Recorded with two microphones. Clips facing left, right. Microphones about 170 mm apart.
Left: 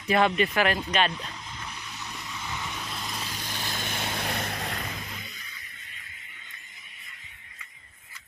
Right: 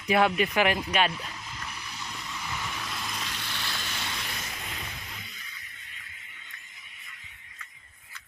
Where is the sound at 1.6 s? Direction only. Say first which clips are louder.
Right 1 dB; 15° left (ahead or behind).